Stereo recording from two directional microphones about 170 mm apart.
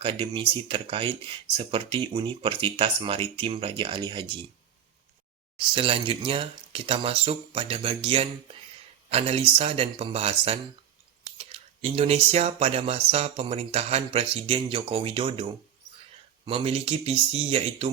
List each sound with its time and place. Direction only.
0.0 s speech: 30° right (ahead or behind)
5.5 s speech: 30° right (ahead or behind)
16.5 s speech: 35° right (ahead or behind)